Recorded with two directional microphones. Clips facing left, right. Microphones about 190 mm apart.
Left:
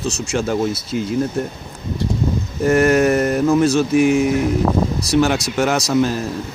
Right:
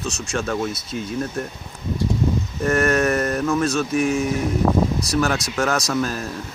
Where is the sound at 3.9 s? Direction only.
80° left.